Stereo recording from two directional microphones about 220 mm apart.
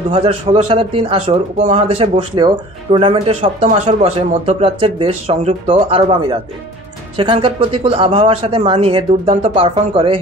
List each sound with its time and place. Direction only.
0.1 s speech: 25° right (ahead or behind)